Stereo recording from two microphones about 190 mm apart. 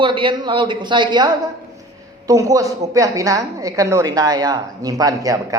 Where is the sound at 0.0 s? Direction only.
25° right (ahead or behind).